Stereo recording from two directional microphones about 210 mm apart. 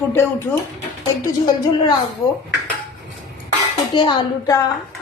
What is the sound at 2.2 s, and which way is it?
Speech, 15° left (ahead or behind).